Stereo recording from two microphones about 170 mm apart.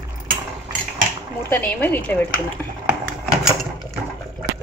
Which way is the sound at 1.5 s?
10° left (ahead or behind).